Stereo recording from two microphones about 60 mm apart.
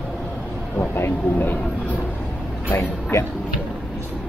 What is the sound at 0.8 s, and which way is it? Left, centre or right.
Speech, left.